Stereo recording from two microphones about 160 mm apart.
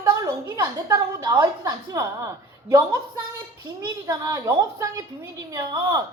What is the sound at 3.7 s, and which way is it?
A woman's voice, 20° right (ahead or behind).